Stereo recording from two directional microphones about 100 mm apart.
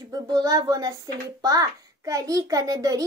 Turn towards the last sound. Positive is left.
turn(degrees=-35)  # may be behind; listen again after turning